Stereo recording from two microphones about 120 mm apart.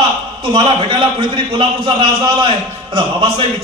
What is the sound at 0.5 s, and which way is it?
A man's voice, 45° right (ahead or behind).